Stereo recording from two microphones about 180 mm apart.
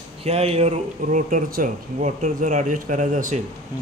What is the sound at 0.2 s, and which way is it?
Speech, 35° right (ahead or behind).